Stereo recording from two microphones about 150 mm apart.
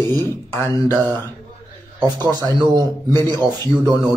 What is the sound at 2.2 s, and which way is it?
A man's voice, 25° right (ahead or behind).